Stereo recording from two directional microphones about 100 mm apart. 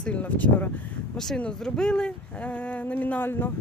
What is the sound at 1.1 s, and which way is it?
Speech, 5° left (ahead or behind).